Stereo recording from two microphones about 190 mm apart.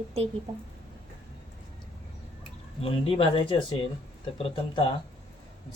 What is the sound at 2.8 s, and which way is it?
Speech, 30° left (ahead or behind).